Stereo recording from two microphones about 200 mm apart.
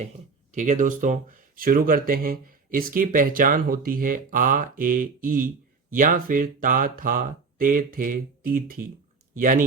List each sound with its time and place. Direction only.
0.5 s speech: 40° right (ahead or behind)